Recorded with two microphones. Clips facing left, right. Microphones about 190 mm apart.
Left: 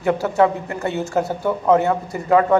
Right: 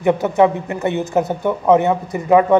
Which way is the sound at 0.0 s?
20° right (ahead or behind).